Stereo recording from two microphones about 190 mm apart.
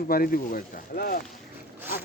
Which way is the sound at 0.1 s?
50° left (ahead or behind).